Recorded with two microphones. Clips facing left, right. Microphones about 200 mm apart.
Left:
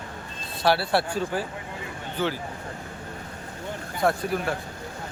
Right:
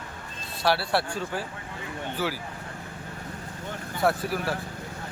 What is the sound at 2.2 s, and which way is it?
Speech, 5° right (ahead or behind).